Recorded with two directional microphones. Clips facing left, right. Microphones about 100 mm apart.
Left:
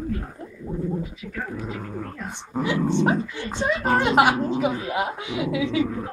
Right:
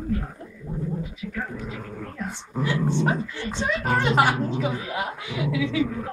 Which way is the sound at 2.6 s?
20° left (ahead or behind).